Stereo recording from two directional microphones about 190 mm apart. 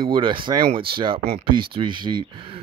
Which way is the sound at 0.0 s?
25° right (ahead or behind).